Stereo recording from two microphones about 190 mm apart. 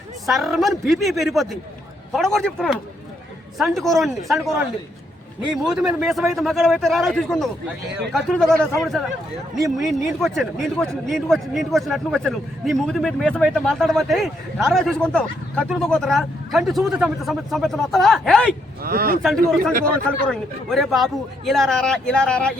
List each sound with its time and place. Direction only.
0.3 s a man's voice: centre (ahead or behind)
5.6 s a man's voice: 5° right (ahead or behind)
18.8 s speech: 50° right (ahead or behind)
19.8 s a man's voice: 5° left (ahead or behind)